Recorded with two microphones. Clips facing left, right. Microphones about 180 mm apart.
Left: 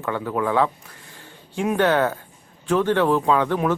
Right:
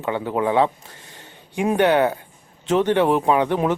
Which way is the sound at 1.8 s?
15° right (ahead or behind).